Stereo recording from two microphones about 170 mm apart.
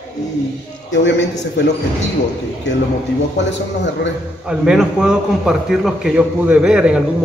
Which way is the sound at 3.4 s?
90° left.